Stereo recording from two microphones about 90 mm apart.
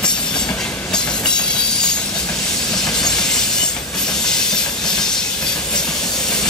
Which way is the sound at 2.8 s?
5° left (ahead or behind).